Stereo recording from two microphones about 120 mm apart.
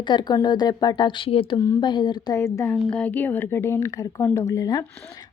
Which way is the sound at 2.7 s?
10° left (ahead or behind).